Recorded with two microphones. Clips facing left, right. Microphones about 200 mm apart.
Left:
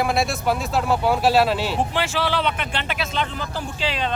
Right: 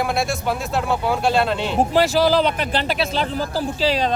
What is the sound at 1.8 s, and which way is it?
Speech, 40° right (ahead or behind).